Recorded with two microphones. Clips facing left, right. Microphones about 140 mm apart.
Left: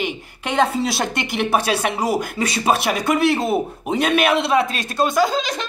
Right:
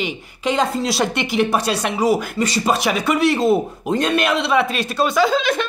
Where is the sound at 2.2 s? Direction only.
55° left (ahead or behind).